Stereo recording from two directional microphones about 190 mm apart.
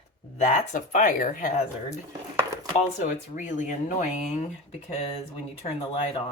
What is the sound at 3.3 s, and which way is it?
Speech, 40° left (ahead or behind).